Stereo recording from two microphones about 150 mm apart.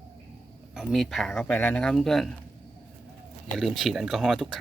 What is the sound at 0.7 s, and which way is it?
Speech, centre (ahead or behind).